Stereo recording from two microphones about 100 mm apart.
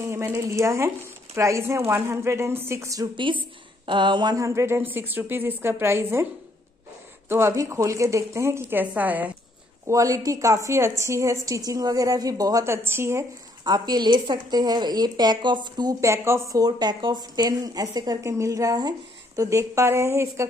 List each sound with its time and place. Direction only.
0.0 s speech: 30° right (ahead or behind)
3.2 s speech: 55° right (ahead or behind)
4.5 s speech: 25° right (ahead or behind)
7.2 s speech: 25° right (ahead or behind)
9.8 s speech: 30° right (ahead or behind)
12.6 s speech: 25° right (ahead or behind)
13.7 s speech: 45° right (ahead or behind)
16.0 s speech: 30° right (ahead or behind)